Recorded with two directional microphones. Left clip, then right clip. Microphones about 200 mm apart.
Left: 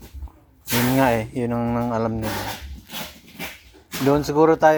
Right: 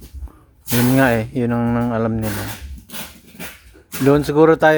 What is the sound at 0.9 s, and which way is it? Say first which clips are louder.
Speech: right 3 dB; 25° right (ahead or behind).